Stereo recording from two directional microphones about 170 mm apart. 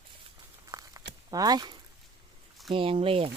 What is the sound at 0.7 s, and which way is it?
Crumpling, 20° right (ahead or behind).